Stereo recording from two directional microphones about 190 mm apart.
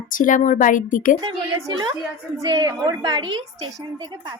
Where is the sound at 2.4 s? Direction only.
20° right (ahead or behind).